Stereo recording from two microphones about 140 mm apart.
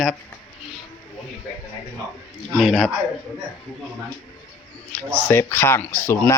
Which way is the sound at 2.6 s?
Centre (ahead or behind).